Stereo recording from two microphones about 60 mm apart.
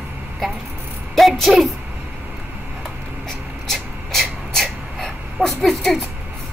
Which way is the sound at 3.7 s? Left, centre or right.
Centre.